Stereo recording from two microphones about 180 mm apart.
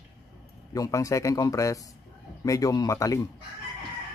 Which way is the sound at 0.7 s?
20° left (ahead or behind).